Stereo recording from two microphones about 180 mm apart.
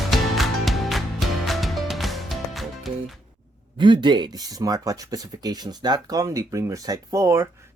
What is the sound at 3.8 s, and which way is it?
Speech, 25° right (ahead or behind).